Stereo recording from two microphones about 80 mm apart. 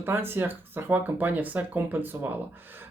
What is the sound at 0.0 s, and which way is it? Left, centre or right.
Speech, right.